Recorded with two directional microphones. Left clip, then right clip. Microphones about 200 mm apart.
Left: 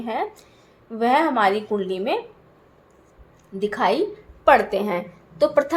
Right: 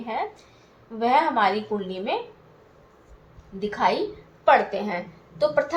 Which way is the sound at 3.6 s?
50° left (ahead or behind).